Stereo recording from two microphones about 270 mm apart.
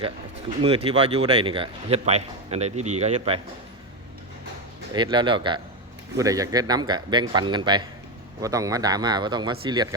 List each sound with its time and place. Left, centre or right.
0.9 s a man's voice: right
4.9 s a man's voice: centre